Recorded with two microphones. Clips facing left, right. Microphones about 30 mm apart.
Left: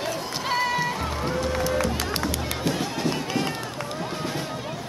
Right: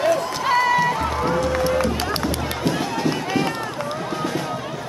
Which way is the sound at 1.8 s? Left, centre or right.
Right.